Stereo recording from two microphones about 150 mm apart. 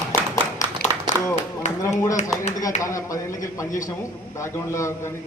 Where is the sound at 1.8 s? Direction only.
20° left (ahead or behind).